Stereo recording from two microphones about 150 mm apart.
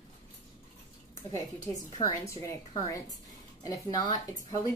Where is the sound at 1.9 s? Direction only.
25° left (ahead or behind).